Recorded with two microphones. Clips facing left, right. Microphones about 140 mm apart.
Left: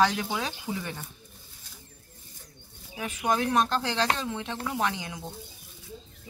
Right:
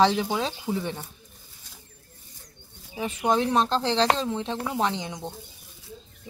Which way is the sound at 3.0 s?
30° right (ahead or behind).